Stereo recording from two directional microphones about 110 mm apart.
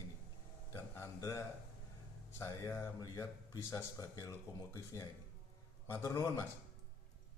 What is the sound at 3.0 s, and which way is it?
Speech, 35° left (ahead or behind).